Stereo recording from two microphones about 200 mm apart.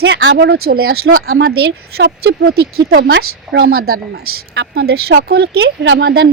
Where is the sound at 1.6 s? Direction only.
55° right (ahead or behind).